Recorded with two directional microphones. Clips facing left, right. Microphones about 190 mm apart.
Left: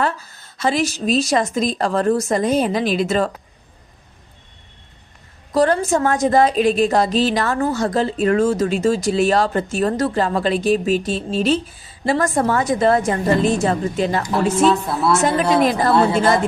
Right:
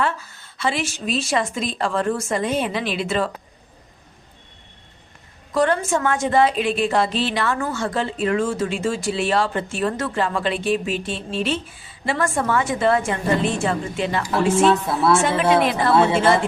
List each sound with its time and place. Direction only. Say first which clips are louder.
0.0 s a woman's voice: left 2 dB; 40° left (ahead or behind)
5.5 s a woman's voice: left 3 dB; 35° left (ahead or behind)
14.6 s a woman's voice: left 2 dB; centre (ahead or behind)
16.2 s a woman's voice: left 1 dB; 40° left (ahead or behind)